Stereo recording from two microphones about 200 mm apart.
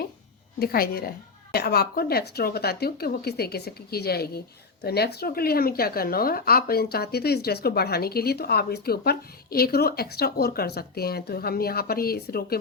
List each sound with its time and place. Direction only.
0.6 s speech: 50° left (ahead or behind)